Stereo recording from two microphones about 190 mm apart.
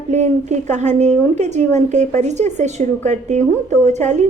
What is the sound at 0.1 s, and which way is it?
A woman's voice, 35° right (ahead or behind).